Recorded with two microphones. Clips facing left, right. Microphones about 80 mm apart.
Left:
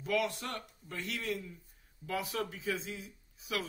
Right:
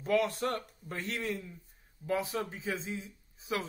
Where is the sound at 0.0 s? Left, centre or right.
Right.